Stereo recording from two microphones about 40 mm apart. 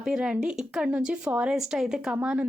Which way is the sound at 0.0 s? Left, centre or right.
Centre.